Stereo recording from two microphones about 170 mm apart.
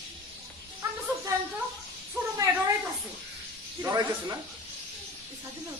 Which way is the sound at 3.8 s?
20° right (ahead or behind).